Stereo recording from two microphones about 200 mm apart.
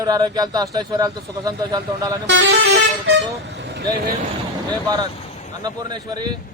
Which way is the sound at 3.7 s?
55° right (ahead or behind).